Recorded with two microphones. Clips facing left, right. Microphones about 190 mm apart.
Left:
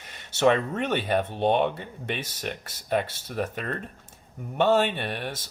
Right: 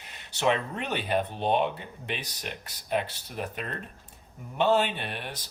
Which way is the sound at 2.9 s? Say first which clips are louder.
Left 3 dB; 50° left (ahead or behind).